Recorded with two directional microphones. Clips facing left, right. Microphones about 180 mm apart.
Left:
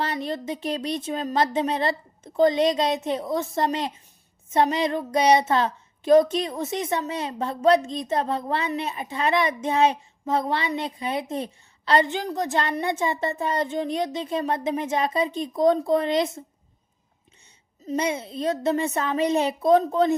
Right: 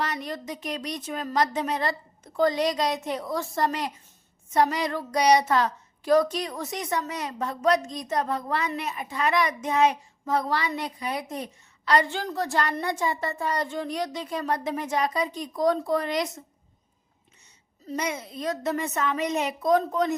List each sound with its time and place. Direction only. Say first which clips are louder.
0.0 s a child's voice: left 3 dB; 30° left (ahead or behind)
17.8 s a child's voice: left 5 dB; 30° left (ahead or behind)